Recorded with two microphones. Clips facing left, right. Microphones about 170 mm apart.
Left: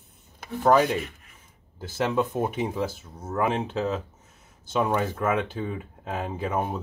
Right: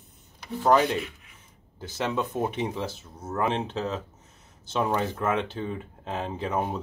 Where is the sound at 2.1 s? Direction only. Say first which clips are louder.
Left 2 dB; 5° left (ahead or behind).